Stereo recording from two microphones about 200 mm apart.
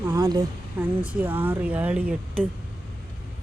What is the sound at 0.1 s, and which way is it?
Speech, 20° right (ahead or behind).